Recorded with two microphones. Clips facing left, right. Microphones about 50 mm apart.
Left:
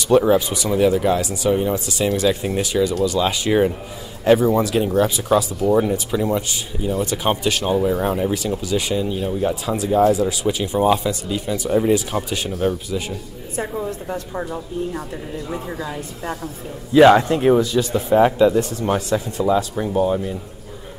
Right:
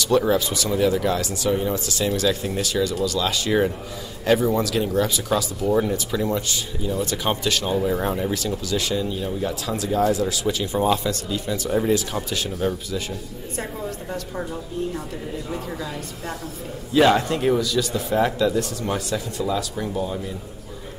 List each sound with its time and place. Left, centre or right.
0.2 s speech: centre